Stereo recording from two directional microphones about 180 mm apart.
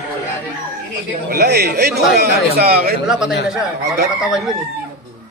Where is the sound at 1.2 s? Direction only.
60° right (ahead or behind).